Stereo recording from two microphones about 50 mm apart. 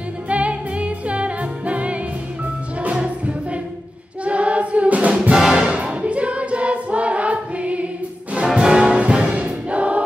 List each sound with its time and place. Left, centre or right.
0.3 s music: right
5.3 s brass instrument: centre
5.7 s choir: right
8.5 s music: right
9.4 s choir: right